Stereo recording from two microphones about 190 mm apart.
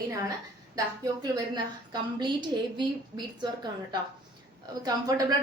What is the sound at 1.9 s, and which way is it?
A woman's voice, 25° right (ahead or behind).